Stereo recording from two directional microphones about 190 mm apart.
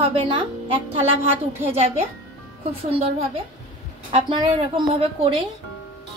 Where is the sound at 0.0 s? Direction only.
30° right (ahead or behind).